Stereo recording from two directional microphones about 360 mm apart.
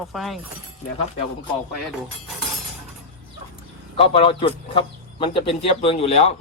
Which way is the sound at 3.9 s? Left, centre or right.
Centre.